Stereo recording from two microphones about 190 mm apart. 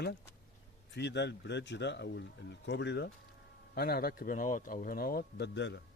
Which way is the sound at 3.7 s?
55° left (ahead or behind).